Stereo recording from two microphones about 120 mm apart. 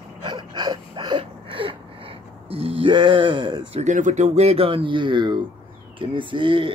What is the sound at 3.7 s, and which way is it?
Speech, 80° right.